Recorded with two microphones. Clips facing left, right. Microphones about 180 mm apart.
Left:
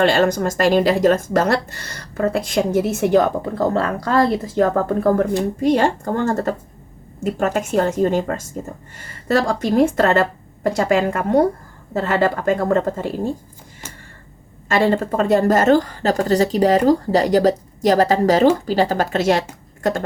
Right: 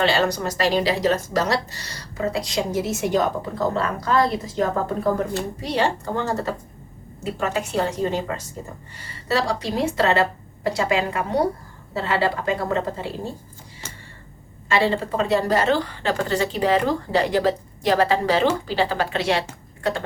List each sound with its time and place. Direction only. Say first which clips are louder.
0.0 s speech: left 5 dB; 50° left (ahead or behind)
14.7 s speech: left 4 dB; 50° left (ahead or behind)